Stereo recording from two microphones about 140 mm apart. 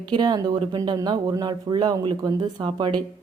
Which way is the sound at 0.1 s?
30° right (ahead or behind).